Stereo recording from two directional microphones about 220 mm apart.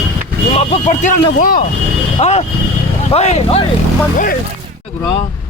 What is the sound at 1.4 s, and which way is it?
Speech, 40° left (ahead or behind).